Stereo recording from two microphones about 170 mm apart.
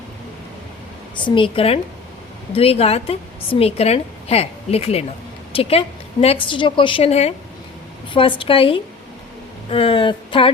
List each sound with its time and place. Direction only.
1.1 s a woman's voice: 30° left (ahead or behind)